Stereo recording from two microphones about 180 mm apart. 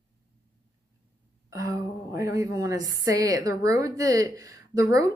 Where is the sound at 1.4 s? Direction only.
20° right (ahead or behind).